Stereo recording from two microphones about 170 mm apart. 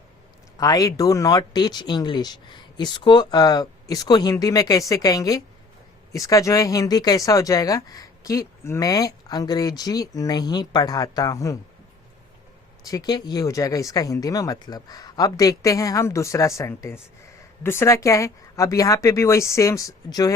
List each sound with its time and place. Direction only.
0.6 s speech: 20° left (ahead or behind)
12.8 s speech: 20° left (ahead or behind)